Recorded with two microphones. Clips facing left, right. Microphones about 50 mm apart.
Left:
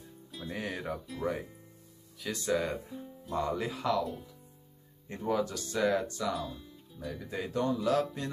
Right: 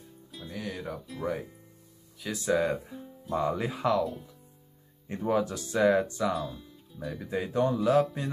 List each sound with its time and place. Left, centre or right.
0.5 s speech: left
0.7 s speech: centre; by 4.0 s right
4.0 s speech: centre
5.0 s speech: centre
6.2 s speech: centre
7.2 s speech: centre